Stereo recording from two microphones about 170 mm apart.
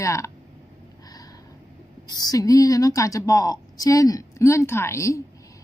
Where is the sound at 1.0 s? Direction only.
20° left (ahead or behind).